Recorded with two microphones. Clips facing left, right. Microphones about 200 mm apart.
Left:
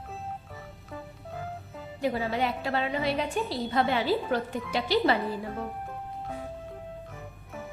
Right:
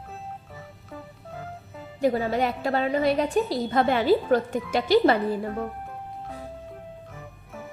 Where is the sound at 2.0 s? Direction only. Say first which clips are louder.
Right 5 dB; 40° right (ahead or behind).